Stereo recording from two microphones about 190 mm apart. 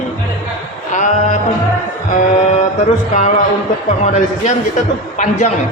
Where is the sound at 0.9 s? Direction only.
40° left (ahead or behind).